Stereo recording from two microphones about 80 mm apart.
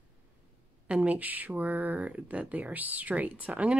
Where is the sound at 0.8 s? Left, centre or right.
Centre.